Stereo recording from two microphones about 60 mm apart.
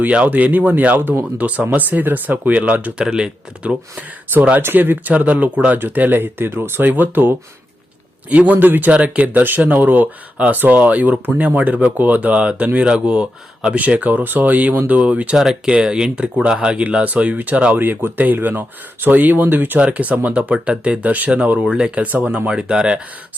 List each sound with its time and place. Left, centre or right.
0.0 s speech: right
4.6 s speech: right
15.4 s speech: centre; by 17.7 s right
17.7 s speech: right; by 23.0 s centre